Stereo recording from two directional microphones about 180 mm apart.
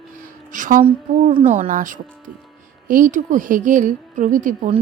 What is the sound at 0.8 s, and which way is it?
Speech, 35° right (ahead or behind).